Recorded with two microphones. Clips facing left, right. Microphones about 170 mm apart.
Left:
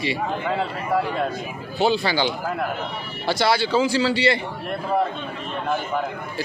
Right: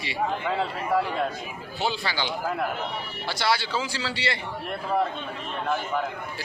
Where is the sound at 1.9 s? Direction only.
20° left (ahead or behind).